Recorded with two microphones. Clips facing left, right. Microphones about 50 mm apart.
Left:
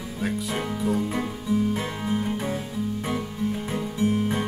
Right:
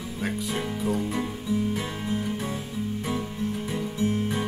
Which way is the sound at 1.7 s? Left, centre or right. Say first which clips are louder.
Left 2 dB; left.